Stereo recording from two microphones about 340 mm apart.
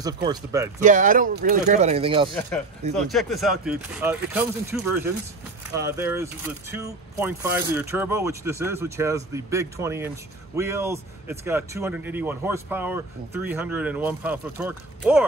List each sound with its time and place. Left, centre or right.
0.0 s speech: centre
0.7 s speech: right
3.0 s speech: centre